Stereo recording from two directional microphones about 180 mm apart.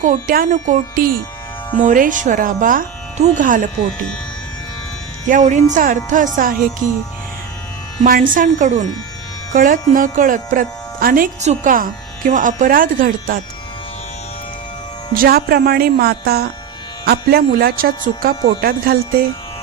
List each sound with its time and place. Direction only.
0.0 s speech: 45° right (ahead or behind)
5.3 s speech: 45° right (ahead or behind)
8.0 s speech: 50° right (ahead or behind)
15.1 s speech: 55° right (ahead or behind)